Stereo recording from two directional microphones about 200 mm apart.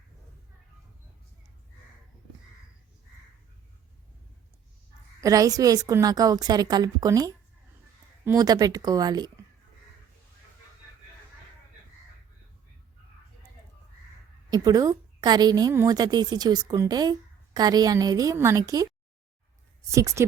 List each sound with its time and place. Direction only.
5.2 s a woman's voice: 15° right (ahead or behind)
14.5 s a woman's voice: 20° right (ahead or behind)
19.9 s speech: 15° right (ahead or behind)